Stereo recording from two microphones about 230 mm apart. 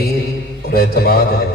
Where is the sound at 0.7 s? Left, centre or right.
Left.